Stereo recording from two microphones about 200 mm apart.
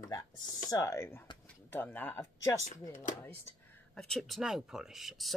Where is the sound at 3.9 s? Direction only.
Centre (ahead or behind).